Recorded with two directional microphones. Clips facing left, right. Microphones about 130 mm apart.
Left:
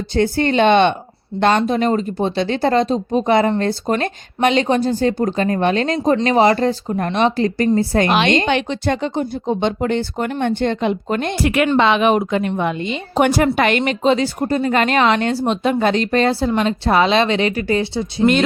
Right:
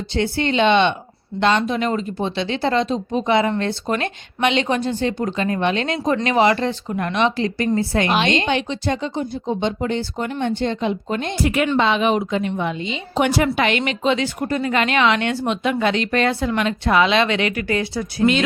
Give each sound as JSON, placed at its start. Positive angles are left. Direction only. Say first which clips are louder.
{"t": 0.1, "sound": "a woman's voice", "louder": "left 4 dB", "side_deg": 45}
{"t": 8.4, "sound": "a woman's voice", "louder": "left 3 dB", "side_deg": 60}